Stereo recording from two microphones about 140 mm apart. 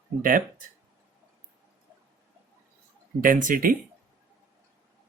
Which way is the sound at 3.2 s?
70° right (ahead or behind).